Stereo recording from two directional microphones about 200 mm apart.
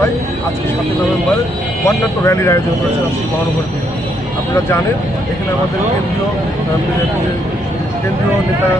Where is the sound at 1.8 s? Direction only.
15° left (ahead or behind).